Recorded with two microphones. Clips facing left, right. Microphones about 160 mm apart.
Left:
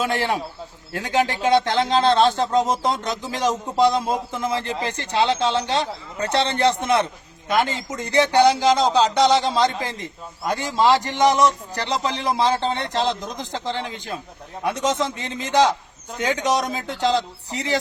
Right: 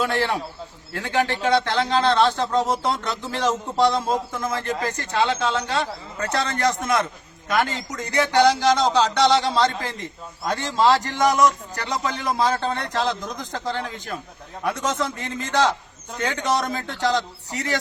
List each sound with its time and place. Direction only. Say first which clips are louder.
0.0 s a man's voice: even; 15° left (ahead or behind)
4.3 s a man's voice: left 1 dB; 25° left (ahead or behind)
17.1 s a man's voice: left 2 dB; 30° left (ahead or behind)